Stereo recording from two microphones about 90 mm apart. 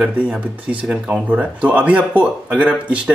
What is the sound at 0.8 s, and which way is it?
Speech, 10° right (ahead or behind).